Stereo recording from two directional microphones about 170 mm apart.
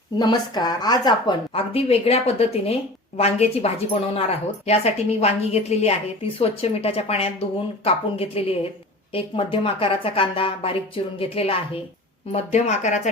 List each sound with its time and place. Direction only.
0.2 s a woman's voice: 25° left (ahead or behind); by 13.0 s 40° left (ahead or behind)